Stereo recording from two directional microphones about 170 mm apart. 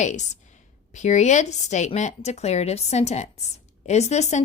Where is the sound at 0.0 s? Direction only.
45° left (ahead or behind).